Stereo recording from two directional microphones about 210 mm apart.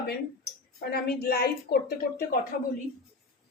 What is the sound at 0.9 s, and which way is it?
A woman's voice, 50° left (ahead or behind).